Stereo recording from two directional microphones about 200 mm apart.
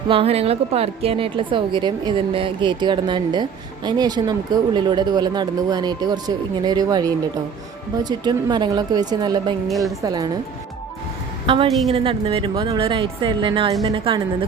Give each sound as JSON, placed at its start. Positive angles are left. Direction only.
{"t": 0.1, "sound": "a woman's voice", "side_deg": -30}
{"t": 9.6, "sound": "a woman's voice", "side_deg": 0}
{"t": 10.0, "sound": "a woman's voice", "side_deg": -20}
{"t": 11.4, "sound": "a woman's voice", "side_deg": -25}